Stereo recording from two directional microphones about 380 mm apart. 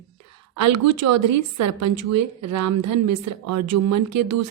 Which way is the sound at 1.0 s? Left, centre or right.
Right.